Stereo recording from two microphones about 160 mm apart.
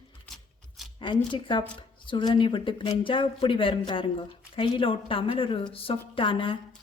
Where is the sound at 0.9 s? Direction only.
30° left (ahead or behind).